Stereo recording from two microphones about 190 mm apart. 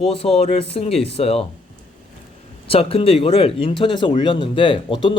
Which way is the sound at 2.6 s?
30° left (ahead or behind).